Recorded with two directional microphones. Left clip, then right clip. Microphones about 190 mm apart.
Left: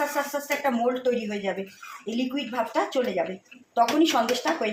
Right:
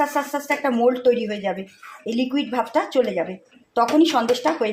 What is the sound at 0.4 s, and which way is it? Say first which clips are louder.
Speech: right 7 dB; 65° right (ahead or behind).